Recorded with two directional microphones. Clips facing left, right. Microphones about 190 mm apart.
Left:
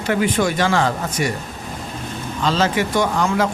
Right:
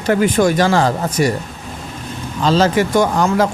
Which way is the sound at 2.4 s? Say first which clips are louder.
Right 5 dB; 40° right (ahead or behind).